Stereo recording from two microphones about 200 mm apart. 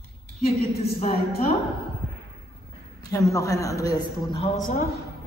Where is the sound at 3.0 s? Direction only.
15° left (ahead or behind).